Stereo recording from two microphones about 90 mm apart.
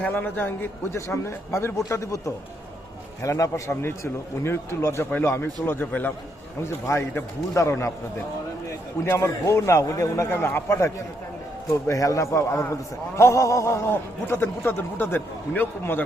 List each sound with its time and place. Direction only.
0.0 s speech: 20° left (ahead or behind)
0.9 s a man's voice: 30° left (ahead or behind)
9.0 s a man's voice: 30° left (ahead or behind)
10.8 s a man's voice: 35° left (ahead or behind)